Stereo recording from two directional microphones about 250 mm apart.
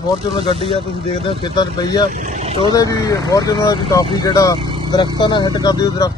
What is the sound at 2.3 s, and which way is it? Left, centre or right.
Speech, right.